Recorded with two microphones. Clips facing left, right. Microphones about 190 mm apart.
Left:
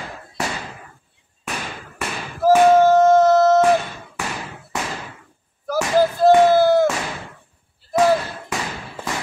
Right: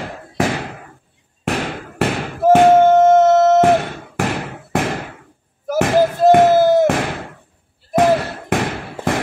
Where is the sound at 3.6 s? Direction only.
65° right (ahead or behind).